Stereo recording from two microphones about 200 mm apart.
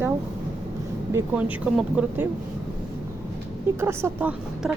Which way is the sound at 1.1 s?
10° right (ahead or behind).